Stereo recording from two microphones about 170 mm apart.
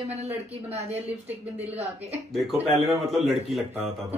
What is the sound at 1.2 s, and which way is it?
Speech, 10° right (ahead or behind).